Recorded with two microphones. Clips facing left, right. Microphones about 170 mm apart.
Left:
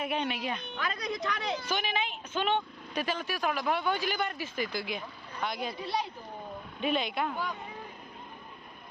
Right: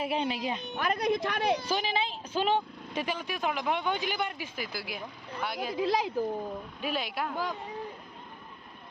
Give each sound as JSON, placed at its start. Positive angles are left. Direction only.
{"t": 0.0, "sound": "speech", "side_deg": -30}
{"t": 0.7, "sound": "a woman's voice", "side_deg": -50}
{"t": 1.6, "sound": "speech", "side_deg": -30}
{"t": 2.9, "sound": "speech", "side_deg": -15}
{"t": 5.7, "sound": "speech", "side_deg": -90}
{"t": 6.8, "sound": "speech", "side_deg": -5}